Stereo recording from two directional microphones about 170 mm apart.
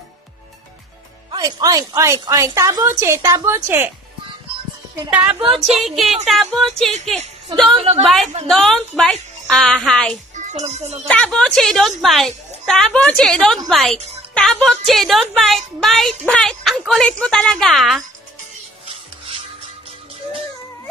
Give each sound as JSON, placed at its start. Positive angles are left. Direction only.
{"t": 1.3, "sound": "a woman's voice", "side_deg": -20}
{"t": 5.1, "sound": "a woman's voice", "side_deg": -10}
{"t": 5.4, "sound": "speech", "side_deg": -35}
{"t": 5.9, "sound": "a woman's voice", "side_deg": 0}
{"t": 10.3, "sound": "a child's voice", "side_deg": -45}
{"t": 11.1, "sound": "a woman's voice", "side_deg": 5}
{"t": 18.9, "sound": "music", "side_deg": -35}